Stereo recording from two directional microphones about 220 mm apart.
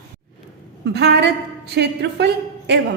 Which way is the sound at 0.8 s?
50° right (ahead or behind).